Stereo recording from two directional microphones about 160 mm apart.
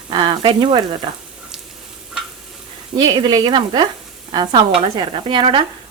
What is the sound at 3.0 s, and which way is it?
Speech, 25° right (ahead or behind).